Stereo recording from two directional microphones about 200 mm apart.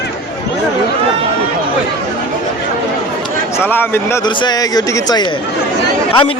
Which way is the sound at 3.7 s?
10° left (ahead or behind).